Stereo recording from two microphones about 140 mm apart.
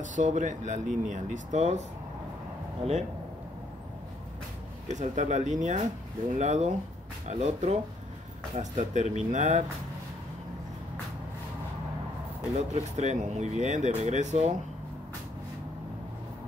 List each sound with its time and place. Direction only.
0.0 s speech: 65° right (ahead or behind); by 3.0 s 45° right (ahead or behind)
4.8 s speech: 55° right (ahead or behind)
12.5 s speech: 55° right (ahead or behind)